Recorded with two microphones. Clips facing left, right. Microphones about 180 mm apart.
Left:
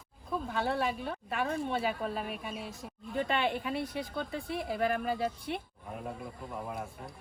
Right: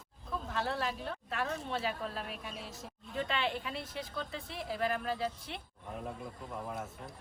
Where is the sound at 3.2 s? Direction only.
55° left (ahead or behind).